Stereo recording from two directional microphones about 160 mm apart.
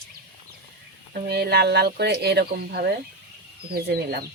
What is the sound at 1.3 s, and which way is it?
Speech, 85° right.